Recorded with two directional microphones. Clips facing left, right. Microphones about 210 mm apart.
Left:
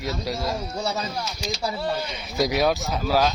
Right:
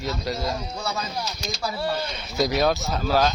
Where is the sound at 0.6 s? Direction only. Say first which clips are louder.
Left 2 dB; 30° left (ahead or behind).